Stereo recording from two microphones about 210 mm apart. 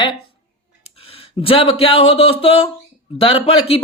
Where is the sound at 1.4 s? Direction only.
25° left (ahead or behind).